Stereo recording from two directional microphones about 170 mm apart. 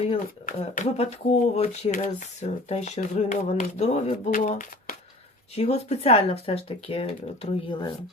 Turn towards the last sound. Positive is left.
turn(degrees=30)  # may be behind; listen again after turning